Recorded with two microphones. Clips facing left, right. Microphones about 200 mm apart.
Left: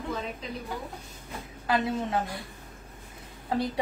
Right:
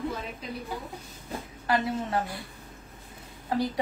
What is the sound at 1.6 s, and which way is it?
Speech, 25° left (ahead or behind).